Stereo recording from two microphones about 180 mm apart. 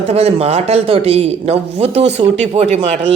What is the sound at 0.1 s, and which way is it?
Speech, 35° right (ahead or behind).